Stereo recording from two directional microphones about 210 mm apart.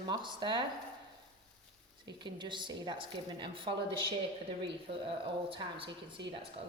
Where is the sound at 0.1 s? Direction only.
20° right (ahead or behind).